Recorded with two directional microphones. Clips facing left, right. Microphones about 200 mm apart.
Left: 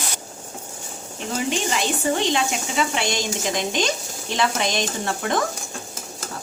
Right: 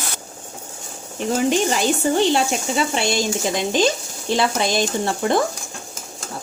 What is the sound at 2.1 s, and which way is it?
Speech, 35° right (ahead or behind).